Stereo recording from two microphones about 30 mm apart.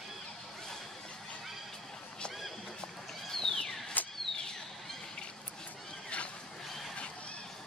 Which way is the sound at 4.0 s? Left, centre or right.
Left.